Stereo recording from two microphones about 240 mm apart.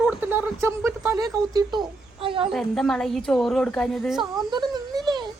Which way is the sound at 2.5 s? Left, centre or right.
Centre.